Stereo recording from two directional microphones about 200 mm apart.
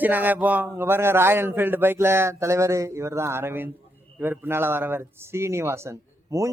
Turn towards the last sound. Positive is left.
turn(degrees=-15)  # may be behind; listen again after turning